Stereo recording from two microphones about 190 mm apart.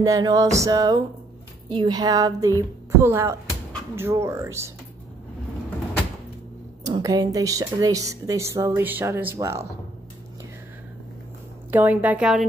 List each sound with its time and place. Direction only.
0.0 s music: 20° right (ahead or behind)
3.0 s speech: 10° right (ahead or behind)
6.8 s a sound: 20° right (ahead or behind)
7.3 s speech: 20° right (ahead or behind)
11.7 s speech: 10° right (ahead or behind)